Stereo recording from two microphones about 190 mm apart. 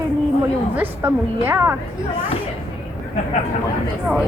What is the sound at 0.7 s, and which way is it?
Speech, 10° right (ahead or behind).